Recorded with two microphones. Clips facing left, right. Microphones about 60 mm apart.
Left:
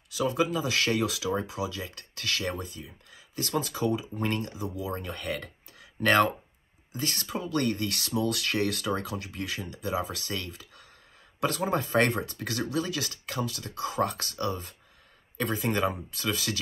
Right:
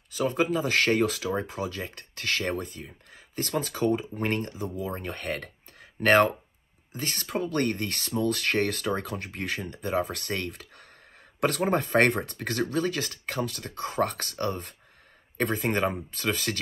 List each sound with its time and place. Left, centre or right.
0.1 s speech: right